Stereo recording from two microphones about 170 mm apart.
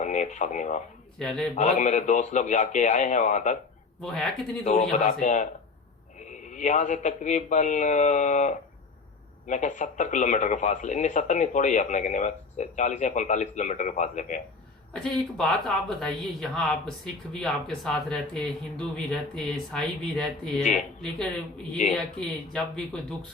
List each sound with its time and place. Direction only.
0.0 s speech: 45° left (ahead or behind)
1.2 s speech: 5° left (ahead or behind)
1.5 s speech: 45° left (ahead or behind)
4.0 s speech: 5° left (ahead or behind)
4.6 s speech: 45° left (ahead or behind)
6.5 s speech: 45° left (ahead or behind)
15.0 s speech: centre (ahead or behind)
21.9 s speech: 5° left (ahead or behind)